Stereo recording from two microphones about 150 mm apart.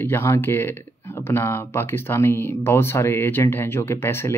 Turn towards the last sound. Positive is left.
turn(degrees=15)  # may be behind; listen again after turning